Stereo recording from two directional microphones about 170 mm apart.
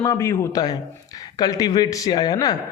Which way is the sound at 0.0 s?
20° left (ahead or behind).